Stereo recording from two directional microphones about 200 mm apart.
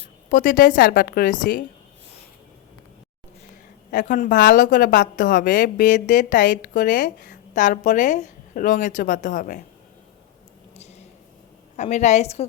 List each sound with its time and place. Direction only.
0.3 s a woman's voice: 45° left (ahead or behind)
3.9 s a woman's voice: 40° left (ahead or behind)
10.8 s a sound: 35° left (ahead or behind)
11.8 s a woman's voice: 35° left (ahead or behind)